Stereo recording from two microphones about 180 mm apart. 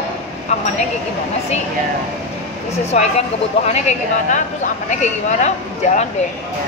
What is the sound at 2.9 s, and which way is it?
A woman's voice, 40° left (ahead or behind).